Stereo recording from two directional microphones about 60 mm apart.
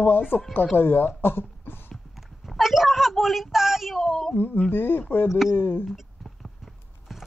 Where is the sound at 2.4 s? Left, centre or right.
Centre.